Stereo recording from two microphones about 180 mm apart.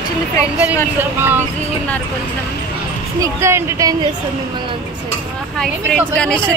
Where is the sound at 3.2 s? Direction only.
15° right (ahead or behind).